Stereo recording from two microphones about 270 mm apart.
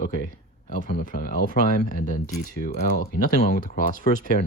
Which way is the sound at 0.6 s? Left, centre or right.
Left.